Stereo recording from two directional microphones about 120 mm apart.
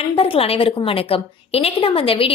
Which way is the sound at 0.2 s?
50° left (ahead or behind).